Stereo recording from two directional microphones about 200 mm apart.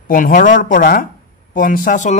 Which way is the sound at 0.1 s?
45° left (ahead or behind).